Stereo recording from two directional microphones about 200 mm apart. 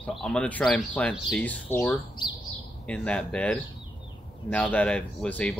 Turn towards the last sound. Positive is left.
turn(degrees=5)  # may be behind; listen again after turning